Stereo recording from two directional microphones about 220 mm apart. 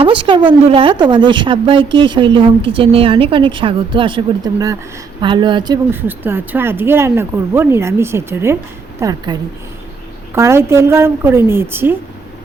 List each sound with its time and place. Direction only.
0.0 s a woman's voice: 25° right (ahead or behind)